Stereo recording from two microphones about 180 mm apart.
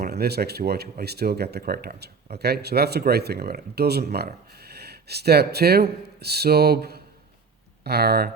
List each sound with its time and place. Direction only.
0.0 s speech: 60° right (ahead or behind)